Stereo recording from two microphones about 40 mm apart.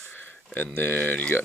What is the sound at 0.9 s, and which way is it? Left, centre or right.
Speech, left.